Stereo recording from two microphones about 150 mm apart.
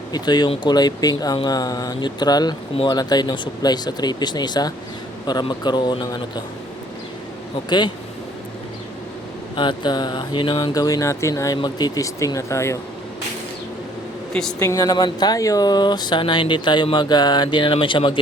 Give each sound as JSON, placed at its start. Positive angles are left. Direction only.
{"t": 0.1, "sound": "speech", "side_deg": 30}
{"t": 7.7, "sound": "speech", "side_deg": 30}
{"t": 9.6, "sound": "speech", "side_deg": 30}
{"t": 14.6, "sound": "speech", "side_deg": 20}